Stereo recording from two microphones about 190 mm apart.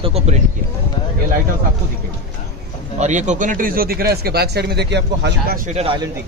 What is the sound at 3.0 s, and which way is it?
Speech, 40° right (ahead or behind).